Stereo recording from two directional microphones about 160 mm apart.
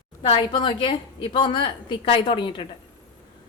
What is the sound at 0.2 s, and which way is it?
A woman's voice, 30° left (ahead or behind).